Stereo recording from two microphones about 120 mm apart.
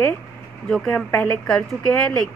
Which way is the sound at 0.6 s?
10° left (ahead or behind).